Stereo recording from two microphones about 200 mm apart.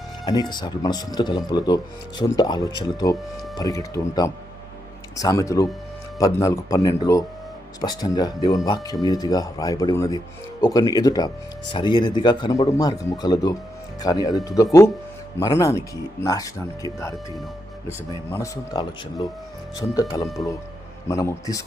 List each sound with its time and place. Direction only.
0.3 s speech: 20° left (ahead or behind)
18.3 s speech: 15° left (ahead or behind)